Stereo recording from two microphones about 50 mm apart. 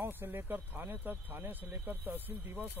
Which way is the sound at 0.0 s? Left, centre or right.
Right.